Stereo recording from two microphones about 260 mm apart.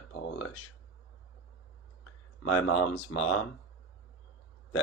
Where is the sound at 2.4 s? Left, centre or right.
Left.